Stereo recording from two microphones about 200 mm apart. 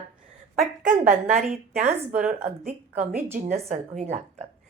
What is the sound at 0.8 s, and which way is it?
A woman's voice, 40° right (ahead or behind).